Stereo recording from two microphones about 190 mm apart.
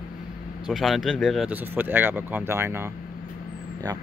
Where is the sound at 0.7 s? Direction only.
Centre (ahead or behind).